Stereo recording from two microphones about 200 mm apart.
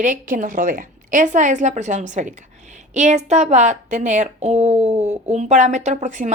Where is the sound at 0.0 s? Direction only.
40° right (ahead or behind).